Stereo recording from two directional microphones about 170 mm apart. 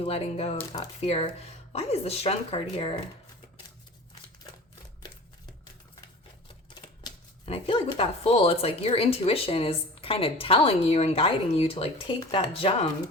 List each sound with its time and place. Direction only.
0.0 s speech: 35° left (ahead or behind)
7.1 s shuffling cards: 25° left (ahead or behind)
7.4 s speech: 30° left (ahead or behind)